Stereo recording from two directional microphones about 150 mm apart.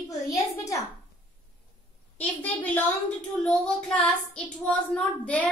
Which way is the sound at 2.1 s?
10° left (ahead or behind).